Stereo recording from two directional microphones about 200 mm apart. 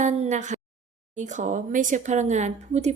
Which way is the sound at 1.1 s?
35° right (ahead or behind).